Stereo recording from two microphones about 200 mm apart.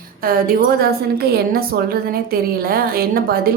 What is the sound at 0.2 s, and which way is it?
A woman's voice, 45° right (ahead or behind).